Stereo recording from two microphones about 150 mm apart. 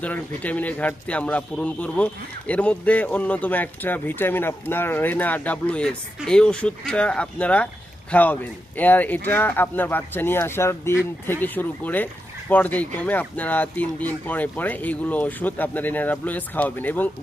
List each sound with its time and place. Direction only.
0.0 s speech: 10° left (ahead or behind)